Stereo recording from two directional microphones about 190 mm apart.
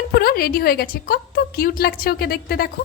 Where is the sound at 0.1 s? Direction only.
55° left (ahead or behind).